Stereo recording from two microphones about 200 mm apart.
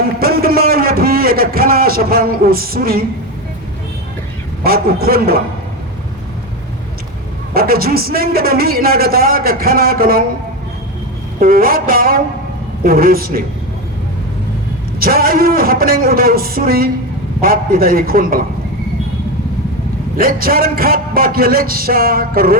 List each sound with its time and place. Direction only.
0.2 s a sound: 50° right (ahead or behind)
4.6 s a man's voice: 50° right (ahead or behind)
7.5 s a man's voice: 50° right (ahead or behind)
11.3 s a man's voice: 45° right (ahead or behind)
14.9 s a man's voice: 50° right (ahead or behind)
20.1 s a man's voice: 45° right (ahead or behind)